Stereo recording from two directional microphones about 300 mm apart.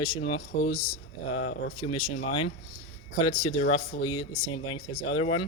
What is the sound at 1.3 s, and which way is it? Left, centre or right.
Speech, left.